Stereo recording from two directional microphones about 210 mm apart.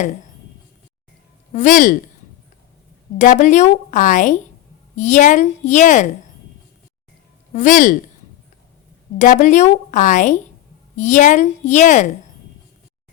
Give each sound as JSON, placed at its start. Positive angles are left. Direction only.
{"t": 1.5, "sound": "a woman's voice", "side_deg": 40}
{"t": 3.2, "sound": "a woman's voice", "side_deg": 35}
{"t": 7.5, "sound": "a woman's voice", "side_deg": 35}
{"t": 9.1, "sound": "a woman's voice", "side_deg": 35}